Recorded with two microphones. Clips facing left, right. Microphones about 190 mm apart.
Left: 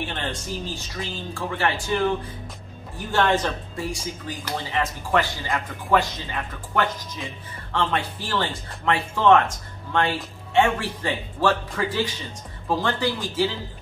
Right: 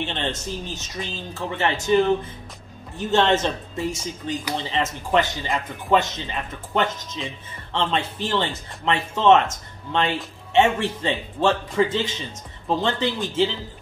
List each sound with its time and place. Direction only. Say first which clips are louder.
0.0 s speech: right 3 dB; 20° right (ahead or behind)
3.0 s speech: right 2 dB; 25° right (ahead or behind)